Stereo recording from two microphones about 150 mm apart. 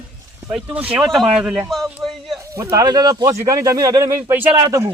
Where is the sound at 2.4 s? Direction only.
20° right (ahead or behind).